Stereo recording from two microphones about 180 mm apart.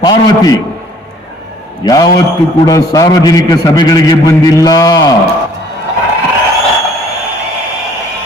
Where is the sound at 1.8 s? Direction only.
20° left (ahead or behind).